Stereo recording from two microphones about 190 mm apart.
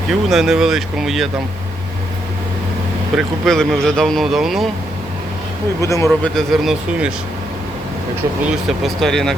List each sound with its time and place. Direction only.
0.1 s speech: centre (ahead or behind)
3.2 s speech: centre (ahead or behind)
5.8 s a man's voice: 15° left (ahead or behind)
6.3 s speech: centre (ahead or behind)
8.8 s speech: centre (ahead or behind)